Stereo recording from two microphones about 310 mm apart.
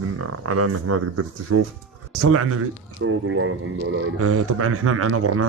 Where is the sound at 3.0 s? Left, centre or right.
Right.